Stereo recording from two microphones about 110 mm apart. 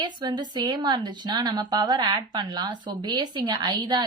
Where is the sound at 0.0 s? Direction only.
40° right (ahead or behind).